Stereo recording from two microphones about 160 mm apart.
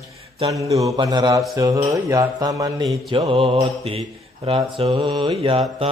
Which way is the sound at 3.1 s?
35° right (ahead or behind).